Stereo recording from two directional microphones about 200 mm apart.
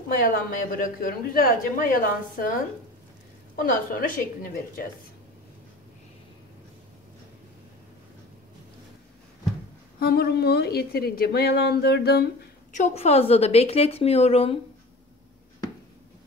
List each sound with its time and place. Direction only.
0.2 s a woman's voice: 45° left (ahead or behind)
3.5 s a woman's voice: 45° left (ahead or behind)
9.9 s a woman's voice: 50° left (ahead or behind)
12.7 s a woman's voice: 35° left (ahead or behind)